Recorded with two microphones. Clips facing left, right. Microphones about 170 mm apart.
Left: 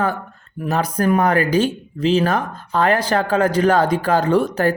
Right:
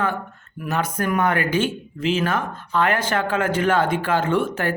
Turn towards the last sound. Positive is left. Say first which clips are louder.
# left 5 dB
turn(degrees=40)  # may be behind; listen again after turning